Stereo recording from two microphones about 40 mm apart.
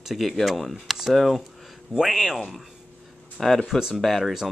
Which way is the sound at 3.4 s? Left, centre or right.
Centre.